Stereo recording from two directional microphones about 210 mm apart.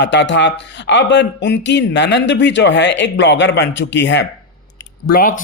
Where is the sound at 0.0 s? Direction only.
55° left (ahead or behind).